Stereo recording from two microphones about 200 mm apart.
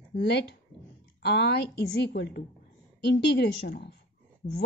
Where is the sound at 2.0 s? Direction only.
55° left (ahead or behind).